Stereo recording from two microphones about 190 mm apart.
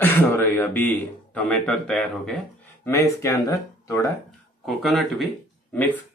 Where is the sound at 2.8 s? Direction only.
15° left (ahead or behind).